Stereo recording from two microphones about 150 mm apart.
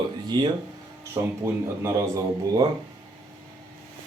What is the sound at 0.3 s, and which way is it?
Speech, 30° right (ahead or behind).